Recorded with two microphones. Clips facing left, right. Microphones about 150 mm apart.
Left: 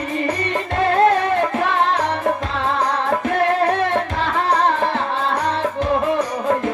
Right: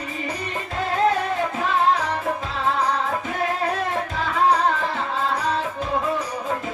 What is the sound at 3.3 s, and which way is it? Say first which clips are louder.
Music: left 7 dB; 70° left (ahead or behind).